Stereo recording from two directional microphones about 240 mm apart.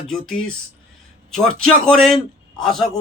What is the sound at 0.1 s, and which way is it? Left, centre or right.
A man's voice, centre.